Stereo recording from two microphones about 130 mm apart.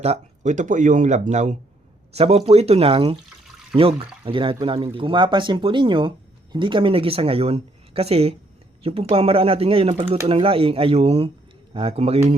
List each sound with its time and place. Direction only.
0.0 s speech: 60° right (ahead or behind)
2.1 s speech: 50° right (ahead or behind)